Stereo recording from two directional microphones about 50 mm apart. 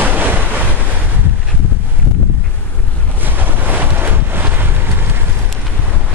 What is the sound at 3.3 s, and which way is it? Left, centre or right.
Wind, right.